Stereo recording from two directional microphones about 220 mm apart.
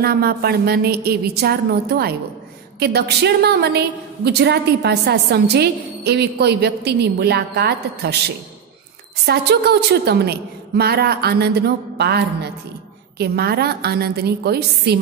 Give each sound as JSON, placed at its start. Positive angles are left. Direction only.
{"t": 0.0, "sound": "a woman's voice", "side_deg": -45}
{"t": 9.2, "sound": "a woman's voice", "side_deg": -50}